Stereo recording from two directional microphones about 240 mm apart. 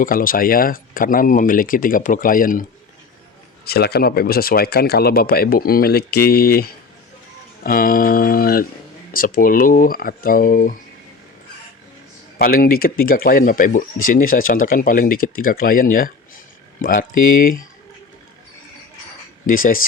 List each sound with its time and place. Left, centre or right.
0.0 s speech: left
3.7 s speech: left
12.4 s speech: left
19.5 s speech: left